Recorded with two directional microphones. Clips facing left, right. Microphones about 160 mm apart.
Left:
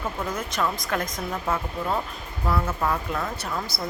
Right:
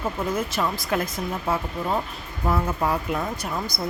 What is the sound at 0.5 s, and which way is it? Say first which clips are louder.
Speech: right 2 dB; 5° right (ahead or behind).